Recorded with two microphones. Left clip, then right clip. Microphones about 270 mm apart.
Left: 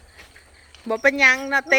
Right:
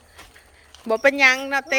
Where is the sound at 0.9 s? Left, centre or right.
Centre.